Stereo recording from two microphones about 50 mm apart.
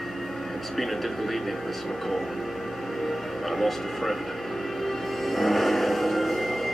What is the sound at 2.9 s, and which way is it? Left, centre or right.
Music, centre.